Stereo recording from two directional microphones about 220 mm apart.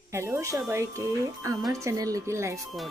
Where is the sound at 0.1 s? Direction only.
10° right (ahead or behind).